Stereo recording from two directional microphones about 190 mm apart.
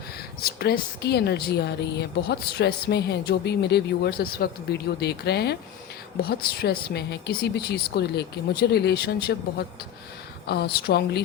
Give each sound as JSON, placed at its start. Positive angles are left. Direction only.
{"t": 0.4, "sound": "a woman's voice", "side_deg": 55}